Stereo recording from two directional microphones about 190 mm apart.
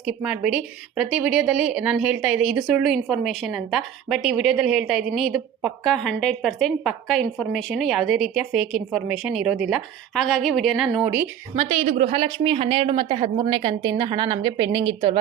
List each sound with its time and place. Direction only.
0.0 s a woman's voice: 5° right (ahead or behind)
11.5 s speech: 30° right (ahead or behind)